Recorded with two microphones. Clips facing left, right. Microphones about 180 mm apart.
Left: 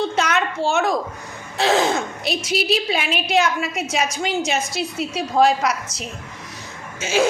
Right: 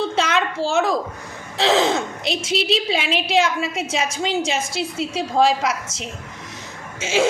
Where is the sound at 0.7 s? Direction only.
30° right (ahead or behind).